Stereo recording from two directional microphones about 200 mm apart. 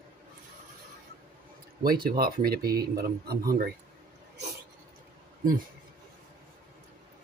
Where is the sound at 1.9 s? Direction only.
50° right (ahead or behind).